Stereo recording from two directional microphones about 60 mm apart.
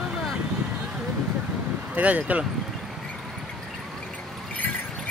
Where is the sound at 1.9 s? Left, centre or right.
Right.